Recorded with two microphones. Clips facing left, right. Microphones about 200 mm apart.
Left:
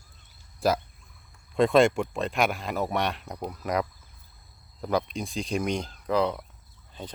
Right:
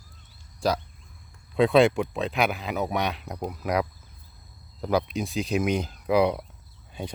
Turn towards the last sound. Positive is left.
turn(degrees=-10)  # may be behind; listen again after turning